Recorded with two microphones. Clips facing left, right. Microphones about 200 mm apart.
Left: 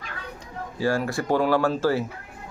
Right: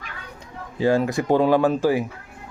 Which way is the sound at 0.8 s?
20° right (ahead or behind).